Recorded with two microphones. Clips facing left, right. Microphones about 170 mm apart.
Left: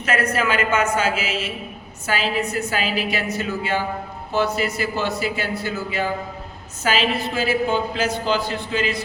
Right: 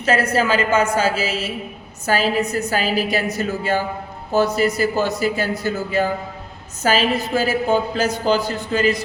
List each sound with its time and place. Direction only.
0.0 s a woman's voice: 30° right (ahead or behind)